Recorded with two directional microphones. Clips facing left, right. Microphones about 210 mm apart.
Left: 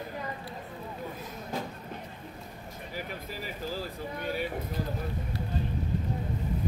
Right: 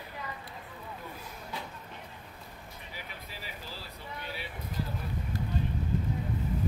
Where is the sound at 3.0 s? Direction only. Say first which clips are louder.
Left 9 dB; 45° left (ahead or behind).